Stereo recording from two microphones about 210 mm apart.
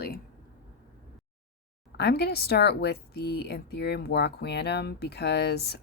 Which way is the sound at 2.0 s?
50° left (ahead or behind).